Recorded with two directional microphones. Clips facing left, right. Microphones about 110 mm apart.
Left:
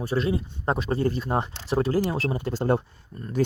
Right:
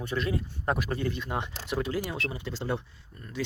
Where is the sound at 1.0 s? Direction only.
40° left (ahead or behind).